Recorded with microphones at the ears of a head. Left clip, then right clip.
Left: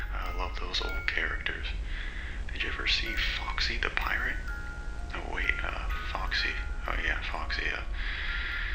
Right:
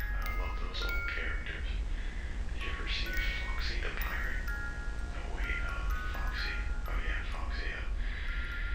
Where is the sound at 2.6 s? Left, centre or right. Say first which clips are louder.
Left 9 dB; left.